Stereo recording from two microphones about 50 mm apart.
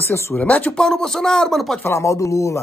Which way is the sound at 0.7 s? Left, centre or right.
Centre.